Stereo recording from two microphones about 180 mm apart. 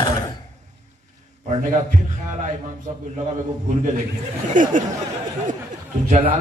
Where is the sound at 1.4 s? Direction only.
45° right (ahead or behind).